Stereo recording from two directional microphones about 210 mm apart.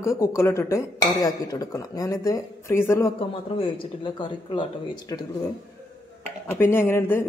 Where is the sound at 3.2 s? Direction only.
25° left (ahead or behind).